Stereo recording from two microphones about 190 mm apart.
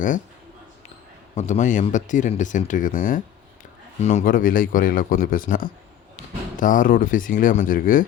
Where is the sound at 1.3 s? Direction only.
40° left (ahead or behind).